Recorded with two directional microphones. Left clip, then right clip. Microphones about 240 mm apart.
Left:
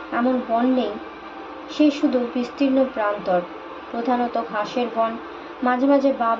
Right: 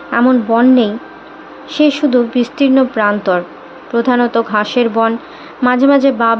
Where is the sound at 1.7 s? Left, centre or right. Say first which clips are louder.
Right 7 dB; right.